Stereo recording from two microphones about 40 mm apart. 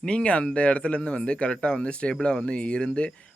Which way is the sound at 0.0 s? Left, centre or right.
Left.